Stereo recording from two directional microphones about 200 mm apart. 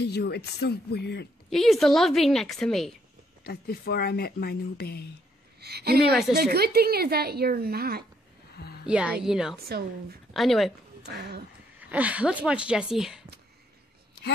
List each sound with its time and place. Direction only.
0.0 s speech: 55° left (ahead or behind)
1.5 s a woman's voice: centre (ahead or behind)
3.4 s speech: 50° left (ahead or behind)
5.6 s a woman's voice: 55° right (ahead or behind)
8.5 s music: 55° left (ahead or behind)
8.8 s a woman's voice: 5° right (ahead or behind)
9.7 s a woman's voice: 50° right (ahead or behind)
10.3 s speech: centre (ahead or behind)
11.1 s a woman's voice: 55° right (ahead or behind)
11.9 s a woman's voice: 5° right (ahead or behind)